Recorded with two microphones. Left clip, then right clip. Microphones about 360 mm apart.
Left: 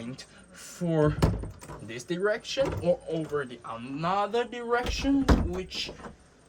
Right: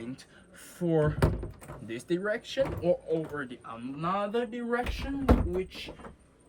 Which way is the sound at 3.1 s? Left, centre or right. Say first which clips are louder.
Left 1 dB; centre.